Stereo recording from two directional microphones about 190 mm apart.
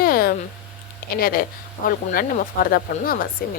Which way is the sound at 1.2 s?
50° left (ahead or behind).